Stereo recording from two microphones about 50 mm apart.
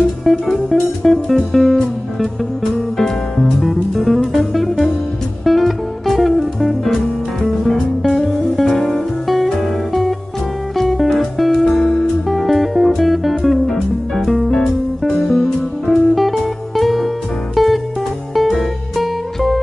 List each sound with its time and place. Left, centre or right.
0.2 s music: centre